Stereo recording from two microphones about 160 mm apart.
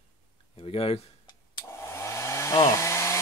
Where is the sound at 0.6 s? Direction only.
35° left (ahead or behind).